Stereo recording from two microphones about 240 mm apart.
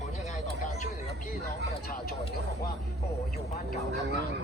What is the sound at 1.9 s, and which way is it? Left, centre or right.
Speech, left.